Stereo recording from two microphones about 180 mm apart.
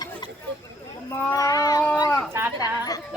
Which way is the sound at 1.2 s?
15° left (ahead or behind).